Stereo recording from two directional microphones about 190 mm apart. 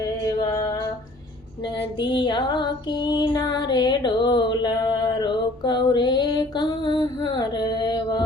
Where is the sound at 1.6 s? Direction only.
25° left (ahead or behind).